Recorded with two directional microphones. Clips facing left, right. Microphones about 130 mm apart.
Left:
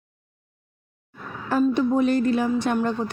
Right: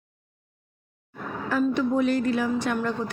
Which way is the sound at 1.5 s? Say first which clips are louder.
Left 3 dB; 30° left (ahead or behind).